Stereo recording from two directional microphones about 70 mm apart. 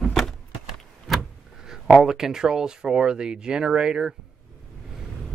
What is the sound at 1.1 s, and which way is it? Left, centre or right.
Vehicle, centre.